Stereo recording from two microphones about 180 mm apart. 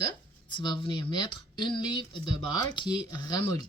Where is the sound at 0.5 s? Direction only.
25° left (ahead or behind).